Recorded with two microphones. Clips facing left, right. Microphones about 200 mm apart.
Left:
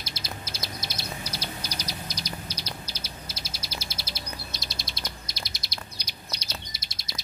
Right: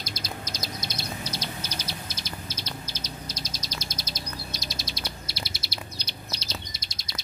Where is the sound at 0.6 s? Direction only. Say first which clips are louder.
Right 2 dB; 5° left (ahead or behind).